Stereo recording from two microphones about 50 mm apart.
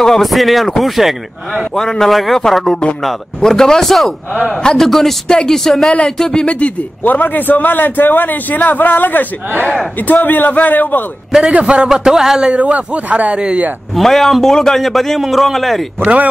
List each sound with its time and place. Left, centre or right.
0.0 s a man's voice: centre
1.8 s a man's voice: centre
6.5 s a man's voice: left
11.9 s a man's voice: centre
12.4 s speech: right
13.9 s a man's voice: centre
16.0 s speech: right